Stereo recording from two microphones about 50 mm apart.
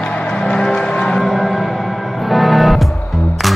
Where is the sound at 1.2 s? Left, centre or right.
Centre.